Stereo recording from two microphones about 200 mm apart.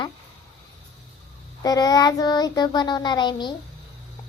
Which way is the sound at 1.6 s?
20° left (ahead or behind).